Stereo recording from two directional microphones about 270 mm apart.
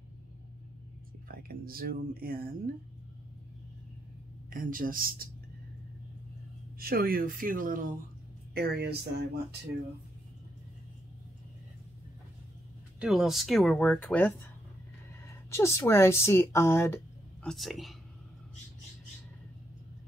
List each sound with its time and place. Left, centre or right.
1.3 s speech: right
4.5 s speech: right
6.8 s speech: right
13.0 s speech: centre